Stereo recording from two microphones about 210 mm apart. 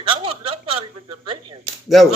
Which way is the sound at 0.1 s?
25° right (ahead or behind).